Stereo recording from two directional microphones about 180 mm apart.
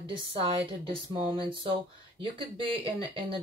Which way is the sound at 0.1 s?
30° right (ahead or behind).